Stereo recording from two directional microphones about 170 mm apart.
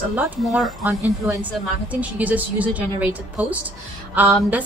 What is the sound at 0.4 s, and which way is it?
Speech, centre (ahead or behind).